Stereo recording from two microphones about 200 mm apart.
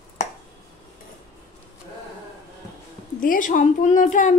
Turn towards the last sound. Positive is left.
turn(degrees=40)  # may be behind; listen again after turning